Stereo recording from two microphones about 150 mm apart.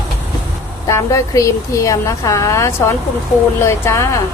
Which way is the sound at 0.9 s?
20° left (ahead or behind).